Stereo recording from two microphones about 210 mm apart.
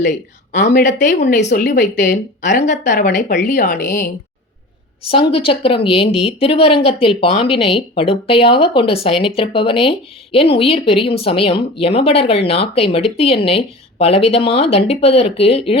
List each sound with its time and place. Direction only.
0.5 s speech: 50° left (ahead or behind)
1.3 s speech: 35° left (ahead or behind)
1.6 s speech: 55° left (ahead or behind)
2.0 s speech: 35° left (ahead or behind)
5.3 s speech: 25° left (ahead or behind)